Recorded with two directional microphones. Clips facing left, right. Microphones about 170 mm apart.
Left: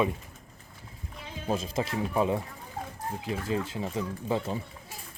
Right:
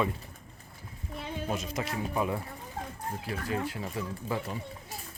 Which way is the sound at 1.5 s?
25° left (ahead or behind).